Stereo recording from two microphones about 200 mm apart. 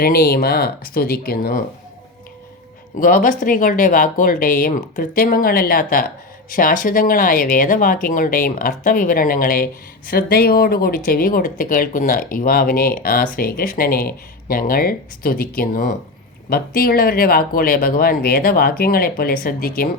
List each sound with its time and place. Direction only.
0.0 s speech: 50° left (ahead or behind)
3.0 s speech: 45° left (ahead or behind)